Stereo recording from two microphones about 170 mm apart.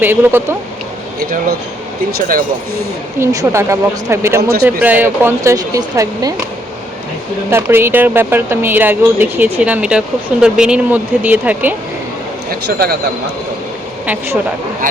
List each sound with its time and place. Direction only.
0.0 s speech: 10° right (ahead or behind)
1.2 s a man's voice: 60° right (ahead or behind)
3.2 s speech: 15° right (ahead or behind)
7.5 s speech: 15° right (ahead or behind)
12.5 s a man's voice: 65° right (ahead or behind)